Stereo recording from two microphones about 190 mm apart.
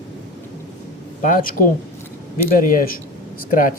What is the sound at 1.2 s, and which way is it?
Speech, 45° left (ahead or behind).